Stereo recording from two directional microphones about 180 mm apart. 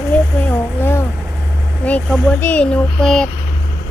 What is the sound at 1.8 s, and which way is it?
Speech, 10° left (ahead or behind).